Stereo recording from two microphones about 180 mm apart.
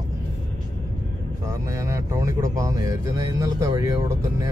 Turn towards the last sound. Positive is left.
turn(degrees=-20)  # may be behind; listen again after turning